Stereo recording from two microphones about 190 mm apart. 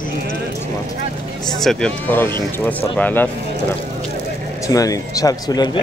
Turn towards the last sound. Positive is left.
turn(degrees=20)  # may be behind; listen again after turning